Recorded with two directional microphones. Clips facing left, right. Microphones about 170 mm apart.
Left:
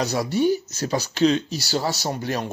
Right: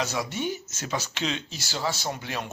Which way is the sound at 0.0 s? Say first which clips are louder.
Left 8 dB; 35° left (ahead or behind).